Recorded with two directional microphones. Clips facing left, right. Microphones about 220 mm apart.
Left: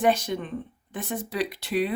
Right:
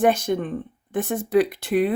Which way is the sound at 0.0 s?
50° right (ahead or behind).